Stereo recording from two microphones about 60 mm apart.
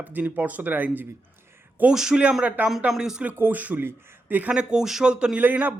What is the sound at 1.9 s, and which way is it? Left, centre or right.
Speech, centre.